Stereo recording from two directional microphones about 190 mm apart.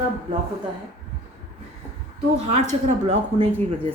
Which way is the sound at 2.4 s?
35° right (ahead or behind).